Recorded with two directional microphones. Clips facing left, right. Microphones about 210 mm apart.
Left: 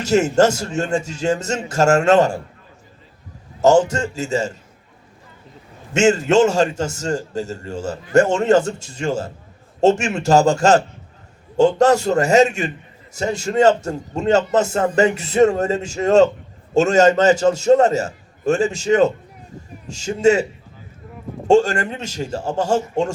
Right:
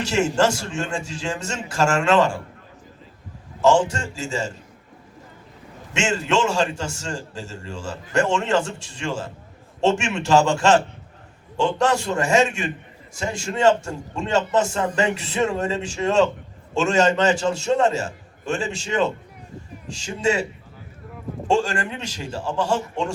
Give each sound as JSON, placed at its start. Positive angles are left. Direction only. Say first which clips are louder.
{"t": 0.0, "sound": "a man's voice", "louder": "left 5 dB", "side_deg": 40}
{"t": 3.6, "sound": "a man's voice", "louder": "left 4 dB", "side_deg": 40}
{"t": 5.9, "sound": "a man's voice", "louder": "left 8 dB", "side_deg": 40}
{"t": 21.4, "sound": "a man's voice", "louder": "left 7 dB", "side_deg": 40}